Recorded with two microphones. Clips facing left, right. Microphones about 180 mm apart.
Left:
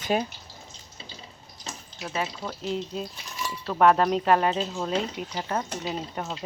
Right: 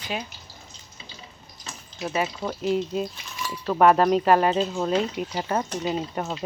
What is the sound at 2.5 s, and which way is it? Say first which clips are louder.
Speech: right 6 dB; 5° right (ahead or behind).